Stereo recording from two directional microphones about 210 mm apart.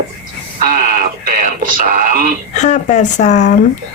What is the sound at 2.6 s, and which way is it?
Speech, 35° left (ahead or behind).